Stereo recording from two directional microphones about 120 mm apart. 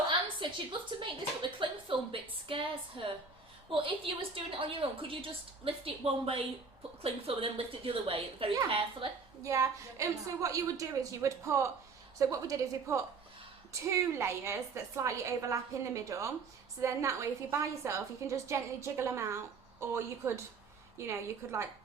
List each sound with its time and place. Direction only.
0.1 s a woman's voice: 40° right (ahead or behind)
9.4 s a woman's voice: 25° right (ahead or behind)